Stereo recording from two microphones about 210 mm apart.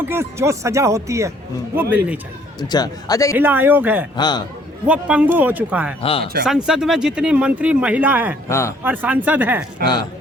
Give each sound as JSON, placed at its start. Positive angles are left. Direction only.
{"t": 0.0, "sound": "speech", "side_deg": -10}
{"t": 2.6, "sound": "a man's voice", "side_deg": 20}
{"t": 3.3, "sound": "speech", "side_deg": -10}
{"t": 4.2, "sound": "a man's voice", "side_deg": 20}
{"t": 4.9, "sound": "speech", "side_deg": -5}
{"t": 6.0, "sound": "a man's voice", "side_deg": 25}
{"t": 6.7, "sound": "speech", "side_deg": 0}
{"t": 8.4, "sound": "speech", "side_deg": 15}
{"t": 8.8, "sound": "speech", "side_deg": -10}
{"t": 9.8, "sound": "a man's voice", "side_deg": 20}